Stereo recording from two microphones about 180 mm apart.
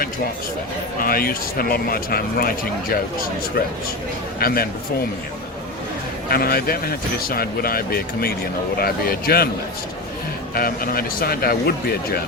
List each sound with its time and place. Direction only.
1.0 s speech: 55° left (ahead or behind)
4.4 s speech: 55° left (ahead or behind)
6.3 s speech: 55° left (ahead or behind)
10.5 s speech: 55° left (ahead or behind)